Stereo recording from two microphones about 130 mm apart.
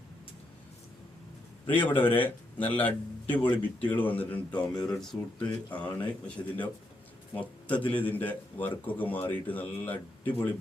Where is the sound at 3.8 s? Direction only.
10° left (ahead or behind).